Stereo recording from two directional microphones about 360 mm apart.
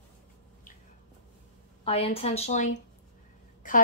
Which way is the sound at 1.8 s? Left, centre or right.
Centre.